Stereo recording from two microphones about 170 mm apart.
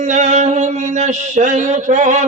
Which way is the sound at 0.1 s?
45° right (ahead or behind).